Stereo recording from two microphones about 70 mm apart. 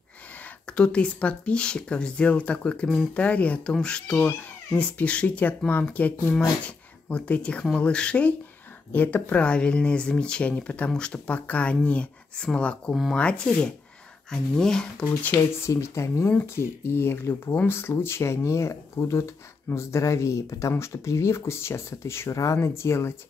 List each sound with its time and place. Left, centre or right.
0.7 s speech: centre
15.6 s speech: left